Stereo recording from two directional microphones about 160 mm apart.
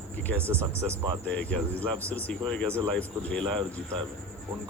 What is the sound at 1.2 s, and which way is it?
Speech, 10° left (ahead or behind).